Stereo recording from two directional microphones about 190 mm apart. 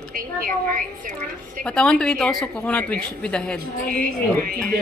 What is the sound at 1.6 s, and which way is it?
A woman's voice, 5° left (ahead or behind).